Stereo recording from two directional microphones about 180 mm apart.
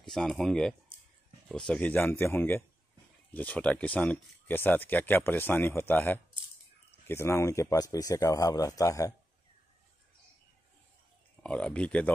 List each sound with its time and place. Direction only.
0.0 s speech: 5° left (ahead or behind); by 9.1 s 20° left (ahead or behind)
11.4 s speech: 5° left (ahead or behind)